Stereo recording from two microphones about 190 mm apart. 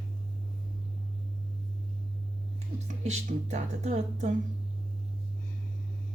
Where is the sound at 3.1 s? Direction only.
35° right (ahead or behind).